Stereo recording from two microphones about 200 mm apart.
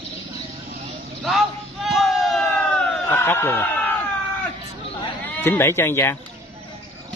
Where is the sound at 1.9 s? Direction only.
Centre (ahead or behind).